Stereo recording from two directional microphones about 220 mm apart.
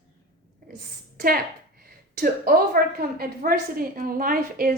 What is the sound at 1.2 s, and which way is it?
A woman's voice, 40° right (ahead or behind).